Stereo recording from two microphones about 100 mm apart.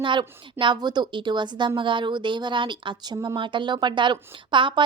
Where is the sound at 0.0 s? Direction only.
55° right (ahead or behind).